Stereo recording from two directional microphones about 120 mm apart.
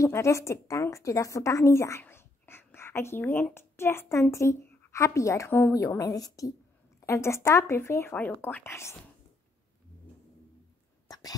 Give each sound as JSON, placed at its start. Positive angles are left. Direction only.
{"t": 0.0, "sound": "a woman's voice", "side_deg": 25}
{"t": 11.1, "sound": "whispering", "side_deg": 30}